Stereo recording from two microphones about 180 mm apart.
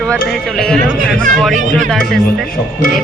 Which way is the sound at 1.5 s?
45° right (ahead or behind).